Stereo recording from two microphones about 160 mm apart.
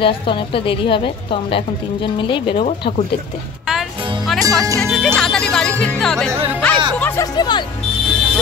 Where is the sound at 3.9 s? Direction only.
30° right (ahead or behind).